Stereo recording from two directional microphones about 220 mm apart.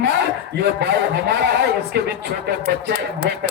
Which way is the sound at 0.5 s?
50° right (ahead or behind).